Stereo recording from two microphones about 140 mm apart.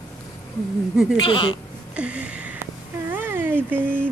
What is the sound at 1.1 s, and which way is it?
Speech, 35° left (ahead or behind).